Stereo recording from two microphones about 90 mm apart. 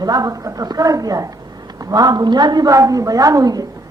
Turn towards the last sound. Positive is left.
turn(degrees=-45)  # may be behind; listen again after turning